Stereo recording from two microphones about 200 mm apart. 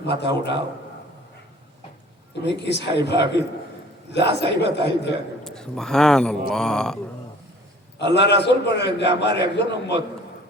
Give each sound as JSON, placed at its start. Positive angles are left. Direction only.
{"t": 0.2, "sound": "a man's voice", "side_deg": 60}
{"t": 2.4, "sound": "a man's voice", "side_deg": 60}
{"t": 5.4, "sound": "a man's voice", "side_deg": 5}
{"t": 7.9, "sound": "a man's voice", "side_deg": 60}